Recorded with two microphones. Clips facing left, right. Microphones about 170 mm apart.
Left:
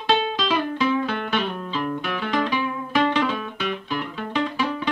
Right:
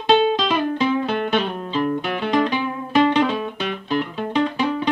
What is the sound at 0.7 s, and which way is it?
Music, 20° right (ahead or behind).